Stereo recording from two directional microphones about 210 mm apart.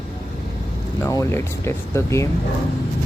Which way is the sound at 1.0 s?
15° left (ahead or behind).